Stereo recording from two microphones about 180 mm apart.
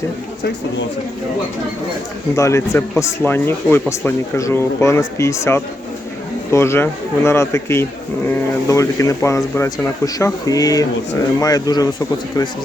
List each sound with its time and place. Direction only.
2.3 s speech: 15° left (ahead or behind)